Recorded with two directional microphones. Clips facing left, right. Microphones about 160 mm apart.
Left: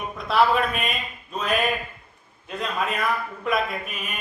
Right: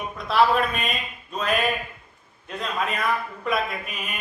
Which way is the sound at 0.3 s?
Centre (ahead or behind).